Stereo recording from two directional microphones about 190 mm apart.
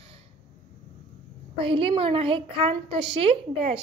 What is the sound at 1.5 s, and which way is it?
A woman's voice, 30° right (ahead or behind).